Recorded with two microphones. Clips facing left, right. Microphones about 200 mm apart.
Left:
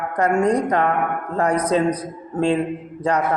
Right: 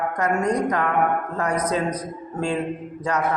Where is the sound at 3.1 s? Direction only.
30° left (ahead or behind).